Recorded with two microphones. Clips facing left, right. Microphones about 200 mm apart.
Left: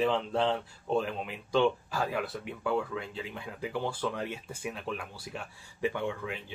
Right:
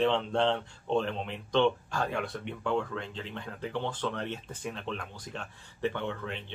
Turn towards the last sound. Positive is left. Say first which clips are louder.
# left 1 dB
turn(degrees=10)  # may be behind; listen again after turning